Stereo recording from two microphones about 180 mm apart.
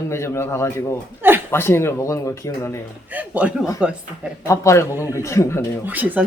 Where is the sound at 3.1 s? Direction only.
10° right (ahead or behind).